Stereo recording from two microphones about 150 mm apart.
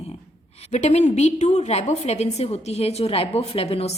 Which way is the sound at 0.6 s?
50° left (ahead or behind).